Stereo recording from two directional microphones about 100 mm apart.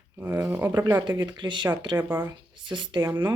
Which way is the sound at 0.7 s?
40° right (ahead or behind).